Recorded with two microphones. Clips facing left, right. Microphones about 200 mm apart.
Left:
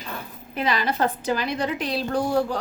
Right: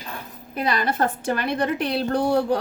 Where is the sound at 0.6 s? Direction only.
45° right (ahead or behind).